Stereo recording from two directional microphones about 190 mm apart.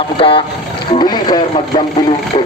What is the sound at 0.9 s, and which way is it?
Vehicle, 20° left (ahead or behind).